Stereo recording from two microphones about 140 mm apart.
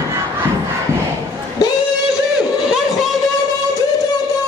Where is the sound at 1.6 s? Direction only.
25° left (ahead or behind).